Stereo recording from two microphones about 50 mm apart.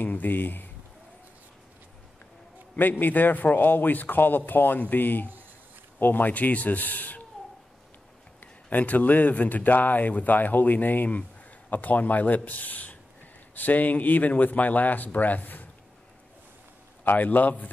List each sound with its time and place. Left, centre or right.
0.0 s speech: left
2.8 s speech: left
8.4 s speech: left
17.0 s speech: left